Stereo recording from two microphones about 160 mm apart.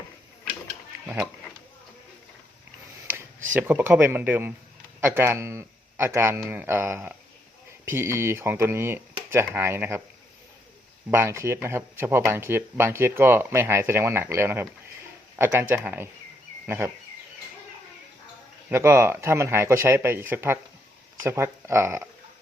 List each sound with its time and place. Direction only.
1.0 s speech: 10° right (ahead or behind)
3.1 s tick-tock: 15° right (ahead or behind)
3.5 s speech: 10° right (ahead or behind)
11.1 s speech: 15° right (ahead or behind)
18.7 s speech: 15° right (ahead or behind)